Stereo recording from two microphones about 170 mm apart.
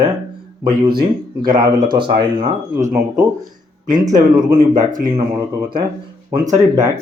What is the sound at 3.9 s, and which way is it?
Speech, 25° right (ahead or behind).